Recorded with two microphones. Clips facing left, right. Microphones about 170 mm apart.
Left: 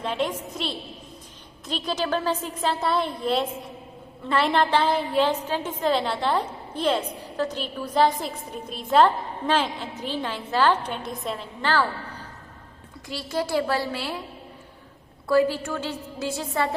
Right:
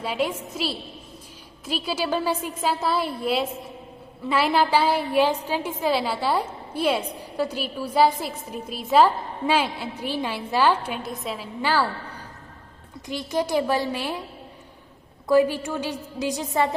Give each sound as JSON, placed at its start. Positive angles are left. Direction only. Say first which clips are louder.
{"t": 0.0, "sound": "a woman's voice", "louder": "right 1 dB", "side_deg": -10}
{"t": 13.1, "sound": "a woman's voice", "louder": "right 2 dB", "side_deg": -20}
{"t": 15.3, "sound": "a woman's voice", "louder": "right 2 dB", "side_deg": -15}